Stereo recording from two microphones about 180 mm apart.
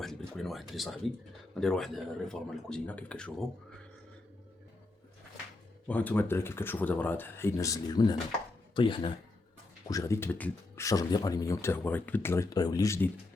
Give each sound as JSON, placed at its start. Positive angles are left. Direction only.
{"t": 0.0, "sound": "speech", "side_deg": 0}
{"t": 5.9, "sound": "speech", "side_deg": 10}
{"t": 9.9, "sound": "speech", "side_deg": 15}